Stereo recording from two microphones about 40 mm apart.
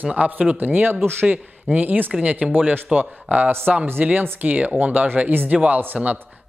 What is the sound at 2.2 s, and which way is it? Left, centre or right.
Speech, right.